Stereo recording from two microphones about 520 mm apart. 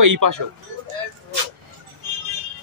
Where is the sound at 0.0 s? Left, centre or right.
Right.